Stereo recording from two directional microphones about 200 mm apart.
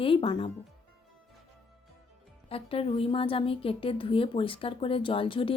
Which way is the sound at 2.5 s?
30° left (ahead or behind).